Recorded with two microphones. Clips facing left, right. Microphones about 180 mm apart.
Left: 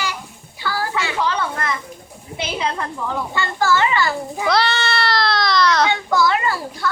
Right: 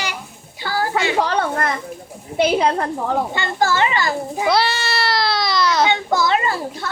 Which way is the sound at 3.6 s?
20° right (ahead or behind).